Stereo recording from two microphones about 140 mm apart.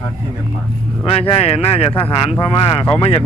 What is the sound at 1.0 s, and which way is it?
Speech, 45° left (ahead or behind).